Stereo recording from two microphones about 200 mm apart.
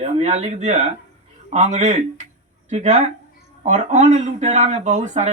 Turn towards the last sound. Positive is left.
turn(degrees=-35)  # may be behind; listen again after turning